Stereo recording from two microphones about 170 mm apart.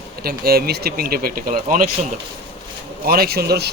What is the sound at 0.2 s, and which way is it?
Speech, 65° right (ahead or behind).